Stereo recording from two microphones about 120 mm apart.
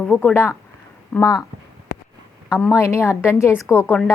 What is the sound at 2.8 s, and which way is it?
A woman's voice, 20° left (ahead or behind).